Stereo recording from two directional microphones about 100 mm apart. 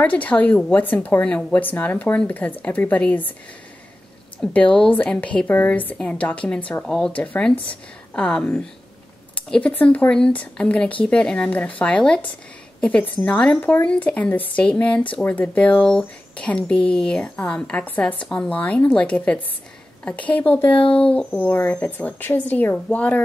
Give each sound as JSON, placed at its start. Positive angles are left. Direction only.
{"t": 0.0, "sound": "speech", "side_deg": 15}
{"t": 4.4, "sound": "speech", "side_deg": 10}